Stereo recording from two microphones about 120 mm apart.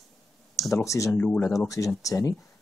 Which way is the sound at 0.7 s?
25° left (ahead or behind).